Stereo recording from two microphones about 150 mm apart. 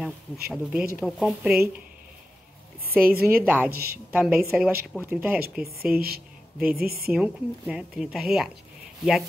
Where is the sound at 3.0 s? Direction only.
80° right.